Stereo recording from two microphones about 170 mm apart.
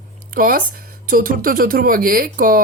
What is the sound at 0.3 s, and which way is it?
Speech, 55° right (ahead or behind).